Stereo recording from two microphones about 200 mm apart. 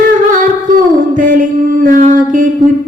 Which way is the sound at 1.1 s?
45° right (ahead or behind).